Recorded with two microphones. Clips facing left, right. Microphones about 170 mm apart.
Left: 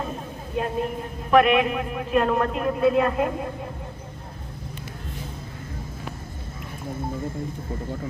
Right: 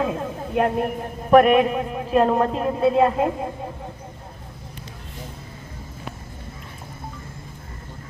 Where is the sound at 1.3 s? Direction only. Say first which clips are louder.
Right 4 dB; 45° right (ahead or behind); by 3.3 s 25° right (ahead or behind).